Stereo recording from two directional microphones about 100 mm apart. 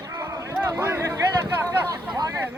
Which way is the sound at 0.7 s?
25° right (ahead or behind).